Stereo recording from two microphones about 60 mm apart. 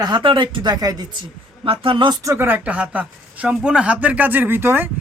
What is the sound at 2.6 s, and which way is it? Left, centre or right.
Speech, right.